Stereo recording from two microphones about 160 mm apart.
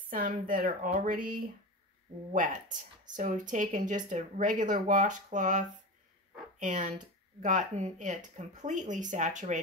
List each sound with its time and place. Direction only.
0.1 s speech: 60° right (ahead or behind)